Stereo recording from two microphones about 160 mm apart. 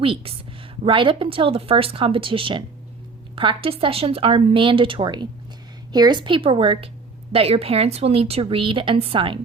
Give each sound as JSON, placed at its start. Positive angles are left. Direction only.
{"t": 0.0, "sound": "a woman's voice", "side_deg": -35}